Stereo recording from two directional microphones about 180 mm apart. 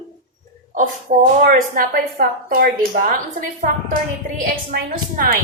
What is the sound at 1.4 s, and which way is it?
A woman's voice, 55° right (ahead or behind).